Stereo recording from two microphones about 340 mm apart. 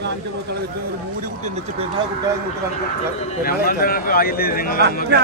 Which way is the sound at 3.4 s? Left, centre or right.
Left.